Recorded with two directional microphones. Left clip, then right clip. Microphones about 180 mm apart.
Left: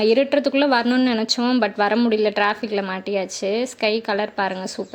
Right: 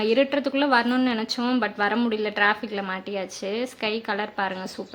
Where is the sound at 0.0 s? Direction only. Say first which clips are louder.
Left 5 dB; 20° left (ahead or behind).